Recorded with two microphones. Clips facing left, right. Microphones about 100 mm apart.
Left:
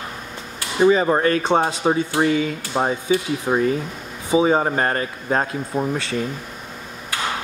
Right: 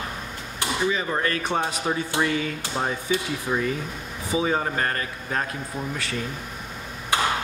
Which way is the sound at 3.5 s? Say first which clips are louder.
Left 7 dB; 40° left (ahead or behind).